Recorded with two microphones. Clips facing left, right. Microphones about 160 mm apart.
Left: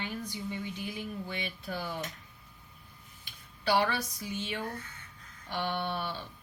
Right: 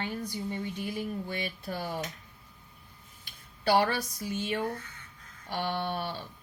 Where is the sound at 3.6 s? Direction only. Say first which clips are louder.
Right 3 dB; 45° right (ahead or behind).